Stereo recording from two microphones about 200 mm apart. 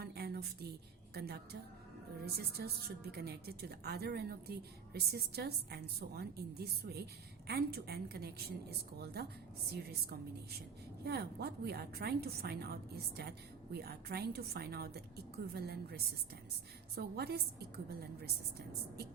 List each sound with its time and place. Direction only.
0.0 s a sound: 50° right (ahead or behind)
2.2 s a woman's voice: 50° right (ahead or behind)
11.0 s a woman's voice: 55° right (ahead or behind)